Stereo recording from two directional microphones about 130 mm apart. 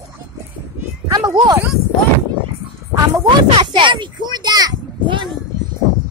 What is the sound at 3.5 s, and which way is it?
A child's voice, 40° right (ahead or behind).